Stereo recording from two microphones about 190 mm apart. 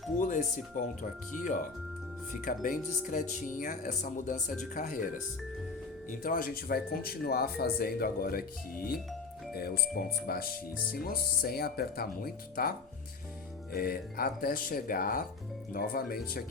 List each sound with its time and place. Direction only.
0.2 s speech: 45° left (ahead or behind)
2.4 s speech: 45° left (ahead or behind)
13.7 s speech: 50° left (ahead or behind)